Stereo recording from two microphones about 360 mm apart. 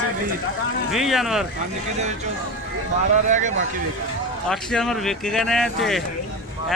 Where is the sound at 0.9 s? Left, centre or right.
Centre.